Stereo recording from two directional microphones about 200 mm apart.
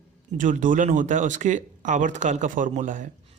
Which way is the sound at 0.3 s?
40° right (ahead or behind).